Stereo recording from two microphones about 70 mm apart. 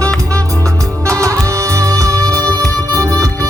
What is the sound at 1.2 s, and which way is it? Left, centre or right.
Music, right.